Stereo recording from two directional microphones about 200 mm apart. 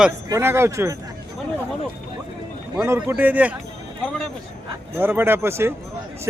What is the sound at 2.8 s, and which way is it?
Speech, 10° right (ahead or behind).